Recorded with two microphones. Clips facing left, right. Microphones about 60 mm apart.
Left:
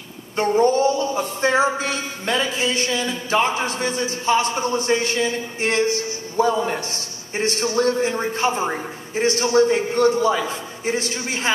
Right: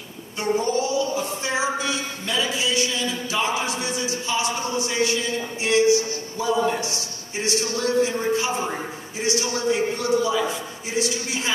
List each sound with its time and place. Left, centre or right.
0.4 s a man's voice: left